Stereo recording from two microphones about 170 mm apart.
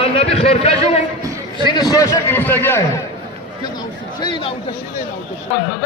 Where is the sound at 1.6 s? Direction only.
25° left (ahead or behind).